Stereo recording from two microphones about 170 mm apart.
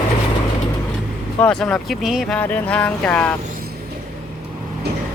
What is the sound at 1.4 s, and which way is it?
Speech, 5° left (ahead or behind).